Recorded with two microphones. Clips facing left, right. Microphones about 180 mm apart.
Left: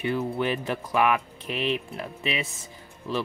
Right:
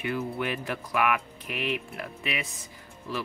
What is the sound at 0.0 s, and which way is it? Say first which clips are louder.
Speech: left 4 dB; 30° left (ahead or behind).